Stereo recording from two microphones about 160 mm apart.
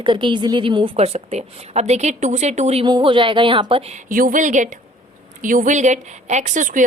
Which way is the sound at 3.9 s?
55° right (ahead or behind).